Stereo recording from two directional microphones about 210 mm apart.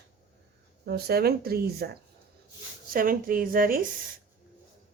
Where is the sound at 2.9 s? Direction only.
40° right (ahead or behind).